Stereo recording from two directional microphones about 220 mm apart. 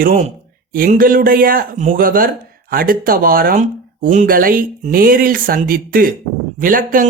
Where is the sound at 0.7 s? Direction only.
40° right (ahead or behind).